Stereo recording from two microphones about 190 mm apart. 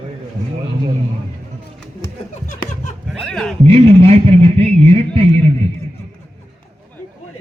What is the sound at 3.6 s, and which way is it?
A man's voice, 30° right (ahead or behind).